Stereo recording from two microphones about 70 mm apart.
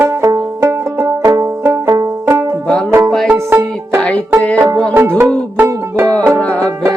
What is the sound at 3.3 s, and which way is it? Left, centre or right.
Music, right.